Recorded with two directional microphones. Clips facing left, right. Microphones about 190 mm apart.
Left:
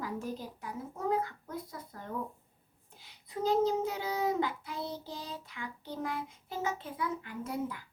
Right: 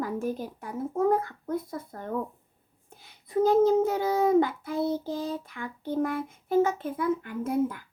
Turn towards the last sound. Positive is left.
turn(degrees=-50)  # may be behind; listen again after turning